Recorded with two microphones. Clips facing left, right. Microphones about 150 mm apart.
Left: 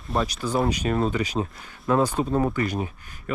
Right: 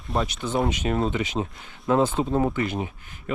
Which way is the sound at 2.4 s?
25° right (ahead or behind).